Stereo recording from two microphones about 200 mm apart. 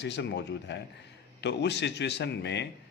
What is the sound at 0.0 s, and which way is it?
A man's voice, 60° left (ahead or behind).